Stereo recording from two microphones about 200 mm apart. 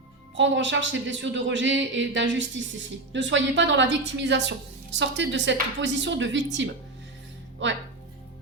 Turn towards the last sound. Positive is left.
turn(degrees=-65)  # may be behind; listen again after turning